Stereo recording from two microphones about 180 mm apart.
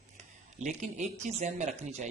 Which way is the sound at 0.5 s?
40° right (ahead or behind).